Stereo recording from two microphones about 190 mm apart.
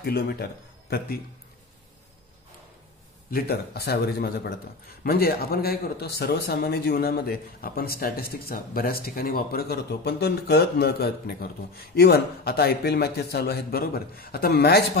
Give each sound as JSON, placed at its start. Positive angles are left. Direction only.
{"t": 0.0, "sound": "speech", "side_deg": 55}
{"t": 3.3, "sound": "a man's voice", "side_deg": 55}